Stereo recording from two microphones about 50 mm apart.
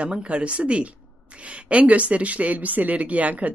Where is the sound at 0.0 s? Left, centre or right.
Right.